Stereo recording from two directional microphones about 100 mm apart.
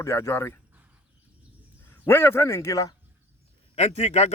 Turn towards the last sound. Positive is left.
turn(degrees=90)